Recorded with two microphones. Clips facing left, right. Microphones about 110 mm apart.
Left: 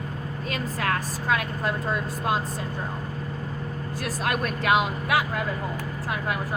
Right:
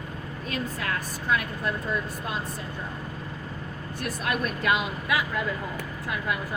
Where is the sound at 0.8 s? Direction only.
60° left (ahead or behind).